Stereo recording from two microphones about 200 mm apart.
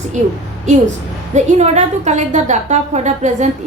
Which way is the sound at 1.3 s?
35° right (ahead or behind).